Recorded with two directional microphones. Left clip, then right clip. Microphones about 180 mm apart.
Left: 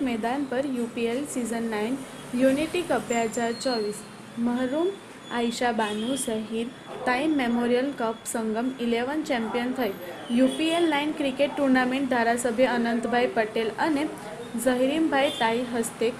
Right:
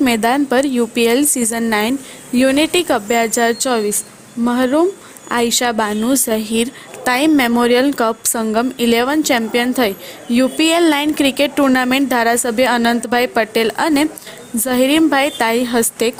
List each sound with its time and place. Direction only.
0.0 s a woman's voice: 75° right (ahead or behind)